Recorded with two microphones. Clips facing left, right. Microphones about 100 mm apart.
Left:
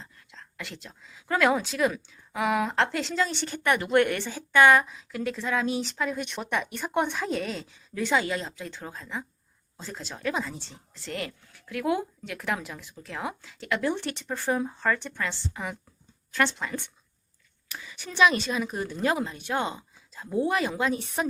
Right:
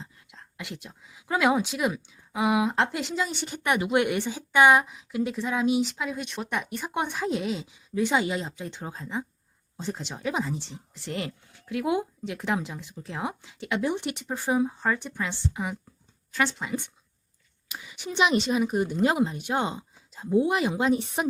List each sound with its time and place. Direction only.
0.0 s a woman's voice: 15° right (ahead or behind)